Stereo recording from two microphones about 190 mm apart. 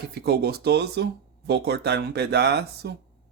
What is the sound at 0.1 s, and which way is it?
Speech, 55° right (ahead or behind).